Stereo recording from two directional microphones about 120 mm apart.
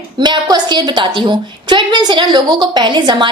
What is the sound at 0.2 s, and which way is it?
A woman's voice, 35° right (ahead or behind).